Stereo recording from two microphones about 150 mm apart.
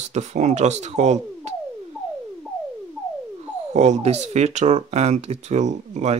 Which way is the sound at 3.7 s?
50° right (ahead or behind).